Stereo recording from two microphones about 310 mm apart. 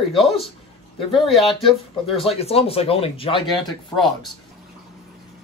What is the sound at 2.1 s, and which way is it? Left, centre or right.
Speech, centre.